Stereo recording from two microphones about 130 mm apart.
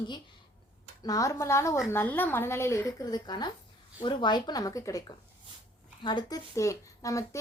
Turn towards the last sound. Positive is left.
turn(degrees=25)  # may be behind; listen again after turning